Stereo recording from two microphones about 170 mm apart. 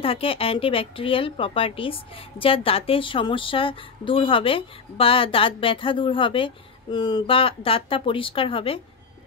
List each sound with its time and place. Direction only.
0.0 s a woman's voice: 35° left (ahead or behind)